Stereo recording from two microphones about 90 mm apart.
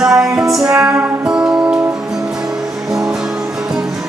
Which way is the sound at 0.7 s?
20° right (ahead or behind).